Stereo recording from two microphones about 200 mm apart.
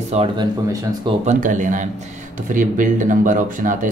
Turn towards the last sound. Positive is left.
turn(degrees=-40)  # may be behind; listen again after turning